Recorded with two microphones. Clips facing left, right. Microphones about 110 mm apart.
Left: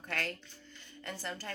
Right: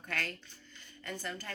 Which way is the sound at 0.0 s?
30° left (ahead or behind).